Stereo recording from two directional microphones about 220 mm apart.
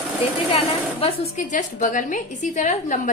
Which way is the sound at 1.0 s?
35° left (ahead or behind).